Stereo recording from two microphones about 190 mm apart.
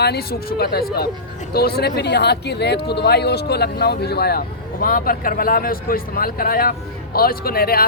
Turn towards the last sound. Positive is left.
turn(degrees=50)  # may be behind; listen again after turning